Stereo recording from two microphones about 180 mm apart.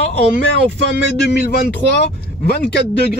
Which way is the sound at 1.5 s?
60° left (ahead or behind).